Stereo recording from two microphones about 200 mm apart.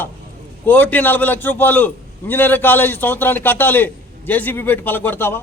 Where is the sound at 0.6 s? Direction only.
10° left (ahead or behind).